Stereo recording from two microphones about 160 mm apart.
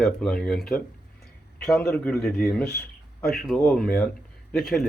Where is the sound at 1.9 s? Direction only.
15° left (ahead or behind).